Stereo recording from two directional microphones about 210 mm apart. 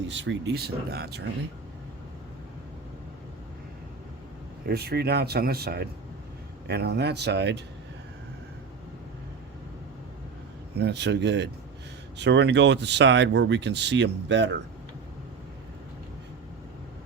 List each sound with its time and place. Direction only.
0.1 s speech: 60° right (ahead or behind)
4.7 s speech: 50° right (ahead or behind)
10.8 s speech: 55° right (ahead or behind)